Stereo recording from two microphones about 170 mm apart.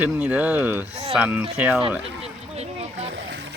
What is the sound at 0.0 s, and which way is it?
Speech, 10° right (ahead or behind).